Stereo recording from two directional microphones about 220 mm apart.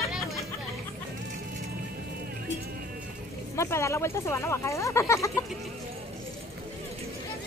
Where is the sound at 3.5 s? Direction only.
10° left (ahead or behind).